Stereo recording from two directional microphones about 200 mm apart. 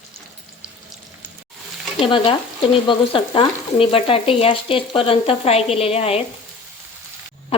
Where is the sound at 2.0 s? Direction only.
25° left (ahead or behind).